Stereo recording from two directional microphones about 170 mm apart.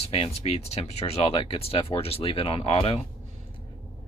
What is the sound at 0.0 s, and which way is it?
Speech, 35° left (ahead or behind).